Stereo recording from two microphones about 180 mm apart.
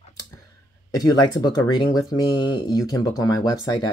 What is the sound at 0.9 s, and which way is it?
Speech, 20° left (ahead or behind).